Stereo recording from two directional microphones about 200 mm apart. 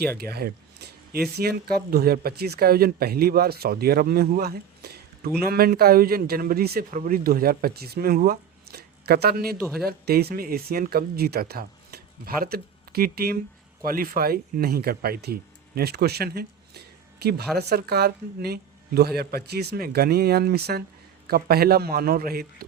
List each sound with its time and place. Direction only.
0.2 s a man's voice: 50° right (ahead or behind)